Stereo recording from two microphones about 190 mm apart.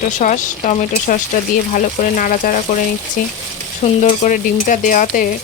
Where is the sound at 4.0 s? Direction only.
40° left (ahead or behind).